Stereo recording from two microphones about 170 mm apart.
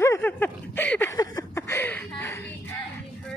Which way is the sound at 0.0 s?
15° left (ahead or behind).